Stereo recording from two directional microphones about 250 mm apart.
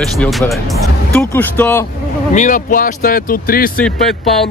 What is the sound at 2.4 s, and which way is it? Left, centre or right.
Speech, left.